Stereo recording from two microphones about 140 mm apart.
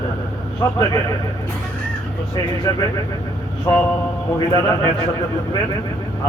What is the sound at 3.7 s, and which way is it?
Speech, 25° left (ahead or behind).